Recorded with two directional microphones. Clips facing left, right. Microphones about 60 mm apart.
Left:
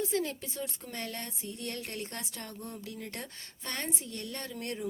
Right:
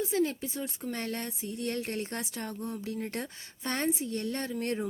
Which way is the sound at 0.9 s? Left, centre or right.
Right.